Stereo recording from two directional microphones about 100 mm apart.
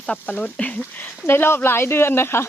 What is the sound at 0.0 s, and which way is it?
Speech, 15° left (ahead or behind).